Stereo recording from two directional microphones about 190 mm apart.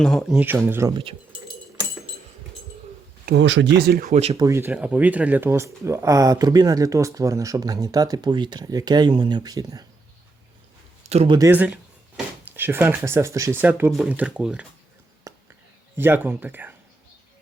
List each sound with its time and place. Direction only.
0.0 s speech: 5° left (ahead or behind); by 1.0 s 15° right (ahead or behind)
3.2 s speech: 70° right (ahead or behind)
4.1 s speech: 35° right (ahead or behind)
4.4 s speech: 15° right (ahead or behind)
11.1 s speech: 30° right (ahead or behind)
11.3 s speech: 10° right (ahead or behind)
15.3 s whispering: 15° right (ahead or behind)
16.0 s speech: 10° right (ahead or behind)